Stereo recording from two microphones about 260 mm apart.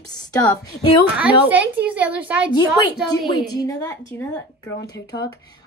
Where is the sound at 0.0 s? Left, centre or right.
Centre.